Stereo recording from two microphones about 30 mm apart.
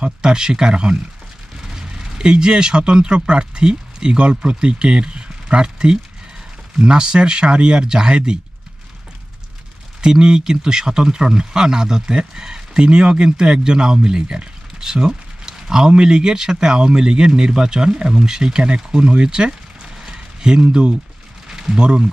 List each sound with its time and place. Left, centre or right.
0.0 s speech: right
10.0 s speech: right
14.8 s a sound: right
15.9 s speech: right
19.8 s clip-clop: right
21.5 s a sound: right
21.8 s speech: right